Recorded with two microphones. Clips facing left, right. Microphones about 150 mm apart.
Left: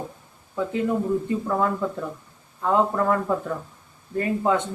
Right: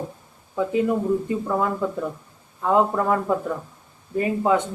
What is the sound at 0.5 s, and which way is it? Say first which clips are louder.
Speech: right 3 dB; 10° right (ahead or behind).